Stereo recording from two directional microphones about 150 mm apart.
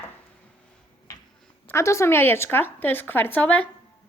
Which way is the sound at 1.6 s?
20° left (ahead or behind).